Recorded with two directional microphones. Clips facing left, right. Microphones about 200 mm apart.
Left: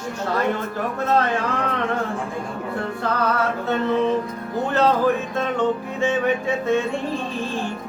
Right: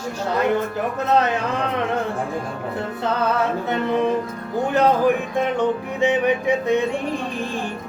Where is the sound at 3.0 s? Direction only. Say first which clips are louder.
Right 2 dB; 20° right (ahead or behind).